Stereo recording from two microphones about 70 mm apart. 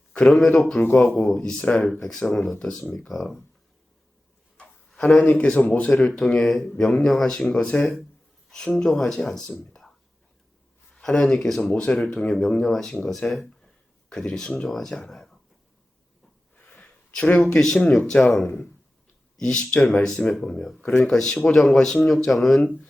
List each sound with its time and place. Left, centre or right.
0.3 s speech: centre
1.4 s speech: centre
4.6 s speech: centre
5.9 s speech: centre
10.9 s speech: centre
11.7 s speech: centre
11.9 s speech: centre
16.6 s a sound: left
17.6 s speech: centre
19.8 s speech: centre
21.5 s speech: centre